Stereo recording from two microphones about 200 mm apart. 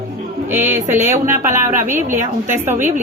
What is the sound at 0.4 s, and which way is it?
Speech, 10° right (ahead or behind).